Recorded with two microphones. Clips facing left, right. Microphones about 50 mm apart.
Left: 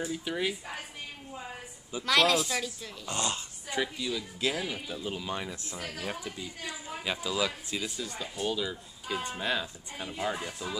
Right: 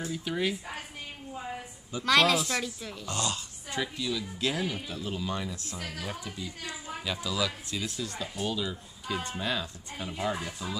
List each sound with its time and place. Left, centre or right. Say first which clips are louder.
0.0 s speech: right 1 dB; centre
2.0 s speech: right 1 dB; centre
3.1 s speech: even; left
3.8 s speech: right 3 dB; centre
4.9 s speech: right 1 dB; centre
10.0 s speech: right 1 dB; centre